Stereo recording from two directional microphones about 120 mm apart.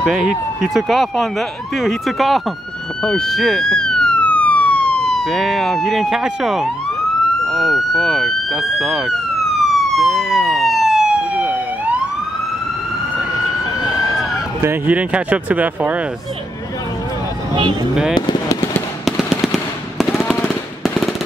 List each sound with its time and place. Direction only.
0.0 s speech: 5° right (ahead or behind)
9.7 s emergency vehicle: centre (ahead or behind)
14.6 s speech: 15° right (ahead or behind)
18.1 s fireworks: 35° left (ahead or behind)
20.0 s machine gun: centre (ahead or behind)